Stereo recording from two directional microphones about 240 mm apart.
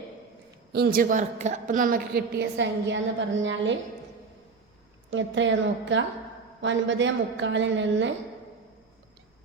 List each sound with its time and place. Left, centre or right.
0.7 s a woman's voice: right
5.1 s a woman's voice: right